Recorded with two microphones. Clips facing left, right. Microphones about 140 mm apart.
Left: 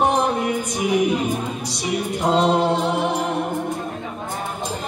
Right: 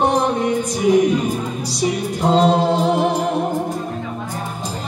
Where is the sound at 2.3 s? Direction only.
35° right (ahead or behind).